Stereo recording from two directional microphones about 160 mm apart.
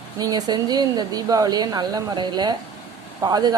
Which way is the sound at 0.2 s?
25° right (ahead or behind).